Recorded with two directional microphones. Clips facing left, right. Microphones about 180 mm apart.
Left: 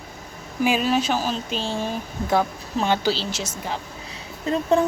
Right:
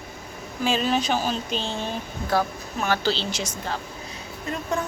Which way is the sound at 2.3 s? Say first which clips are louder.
Left 2 dB; 20° left (ahead or behind).